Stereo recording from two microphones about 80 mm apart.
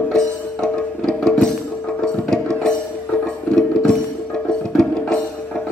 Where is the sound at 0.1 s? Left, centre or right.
Centre.